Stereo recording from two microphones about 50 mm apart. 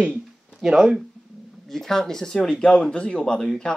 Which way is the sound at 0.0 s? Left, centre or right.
Right.